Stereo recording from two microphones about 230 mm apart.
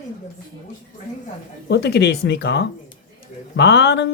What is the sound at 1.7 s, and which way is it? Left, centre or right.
Speech, left.